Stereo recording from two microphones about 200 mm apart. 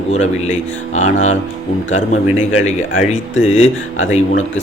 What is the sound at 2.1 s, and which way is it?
A man's voice, 35° left (ahead or behind).